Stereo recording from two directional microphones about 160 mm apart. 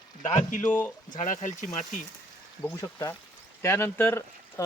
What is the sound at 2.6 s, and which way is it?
Speech, 20° left (ahead or behind).